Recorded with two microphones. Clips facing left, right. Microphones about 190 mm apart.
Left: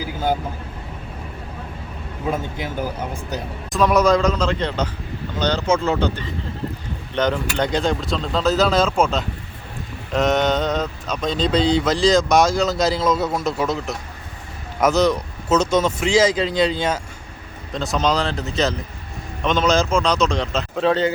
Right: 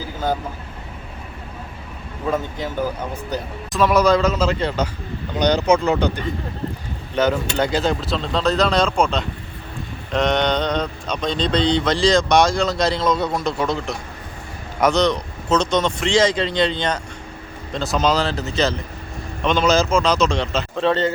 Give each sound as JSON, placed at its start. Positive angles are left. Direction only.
{"t": 0.0, "sound": "vehicle", "side_deg": 10}
{"t": 3.7, "sound": "speech", "side_deg": 0}
{"t": 7.2, "sound": "speech", "side_deg": -5}